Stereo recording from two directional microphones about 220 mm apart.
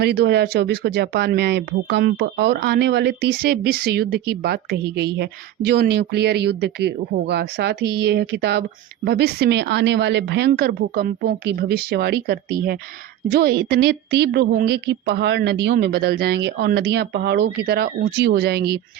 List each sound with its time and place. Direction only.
0.0 s speech: 50° right (ahead or behind)